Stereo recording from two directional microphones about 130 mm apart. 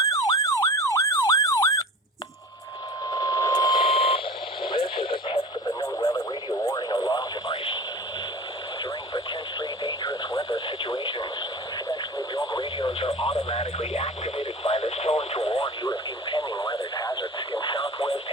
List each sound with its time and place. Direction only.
0.0 s car alarm: 25° left (ahead or behind)
3.1 s radio: 30° left (ahead or behind)
3.8 s a sound: 50° left (ahead or behind)
5.8 s radio: 25° left (ahead or behind)
8.8 s radio: 30° left (ahead or behind)
11.9 s radio: 25° left (ahead or behind)
13.2 s radio: 50° left (ahead or behind)
16.4 s radio: 25° left (ahead or behind)
17.8 s radio: 50° left (ahead or behind)